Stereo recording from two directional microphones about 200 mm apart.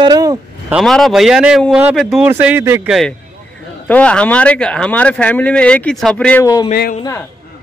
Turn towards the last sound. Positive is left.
turn(degrees=45)  # may be behind; listen again after turning